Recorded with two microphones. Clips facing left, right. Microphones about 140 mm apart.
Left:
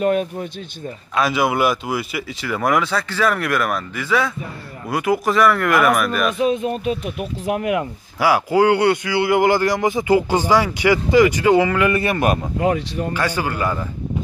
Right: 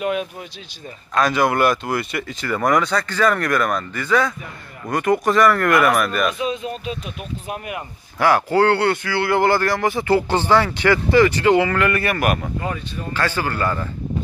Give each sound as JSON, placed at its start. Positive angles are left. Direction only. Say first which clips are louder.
{"t": 0.0, "sound": "speech", "louder": "left 5 dB", "side_deg": 40}
{"t": 1.1, "sound": "speech", "louder": "right 1 dB", "side_deg": 5}
{"t": 6.3, "sound": "speech", "louder": "left 5 dB", "side_deg": 55}
{"t": 8.2, "sound": "speech", "louder": "even", "side_deg": 10}
{"t": 12.5, "sound": "speech", "louder": "left 7 dB", "side_deg": 80}
{"t": 13.1, "sound": "speech", "louder": "right 1 dB", "side_deg": 15}